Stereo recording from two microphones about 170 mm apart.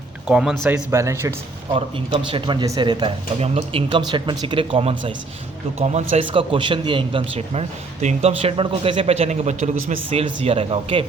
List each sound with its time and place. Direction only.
0.3 s speech: 5° right (ahead or behind)
1.7 s speech: 30° right (ahead or behind)